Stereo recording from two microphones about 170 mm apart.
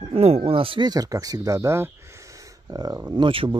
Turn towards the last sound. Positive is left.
turn(degrees=-30)  # may be behind; listen again after turning